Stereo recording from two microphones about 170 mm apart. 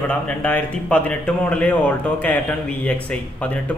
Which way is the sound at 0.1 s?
5° left (ahead or behind).